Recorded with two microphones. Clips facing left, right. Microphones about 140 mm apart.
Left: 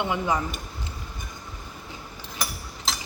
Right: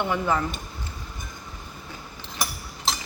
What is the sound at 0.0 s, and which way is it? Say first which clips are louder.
Speech: right 1 dB; 15° left (ahead or behind).